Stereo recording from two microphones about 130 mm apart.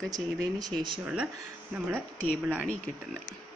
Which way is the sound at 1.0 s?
10° right (ahead or behind).